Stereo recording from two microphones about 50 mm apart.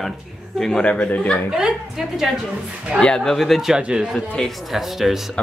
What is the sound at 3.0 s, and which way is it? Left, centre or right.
Speech, centre.